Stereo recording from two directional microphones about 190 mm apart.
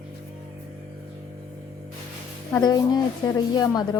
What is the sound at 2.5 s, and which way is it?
A woman's voice, 20° left (ahead or behind).